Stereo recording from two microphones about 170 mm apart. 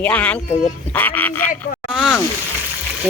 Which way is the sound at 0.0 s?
10° left (ahead or behind).